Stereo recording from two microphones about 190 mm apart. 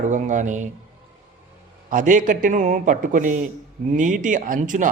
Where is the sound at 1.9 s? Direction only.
40° right (ahead or behind).